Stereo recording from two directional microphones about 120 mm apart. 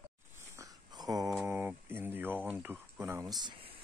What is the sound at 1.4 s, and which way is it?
Speech, 20° right (ahead or behind).